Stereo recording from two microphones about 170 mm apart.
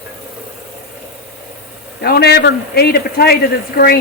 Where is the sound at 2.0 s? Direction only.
65° left (ahead or behind).